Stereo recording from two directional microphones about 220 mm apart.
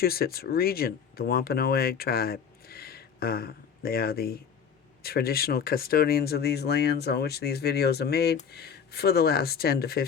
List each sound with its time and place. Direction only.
0.0 s speech: 45° left (ahead or behind)